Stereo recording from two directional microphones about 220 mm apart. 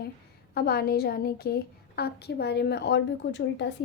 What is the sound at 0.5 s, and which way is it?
A woman's voice, 45° left (ahead or behind).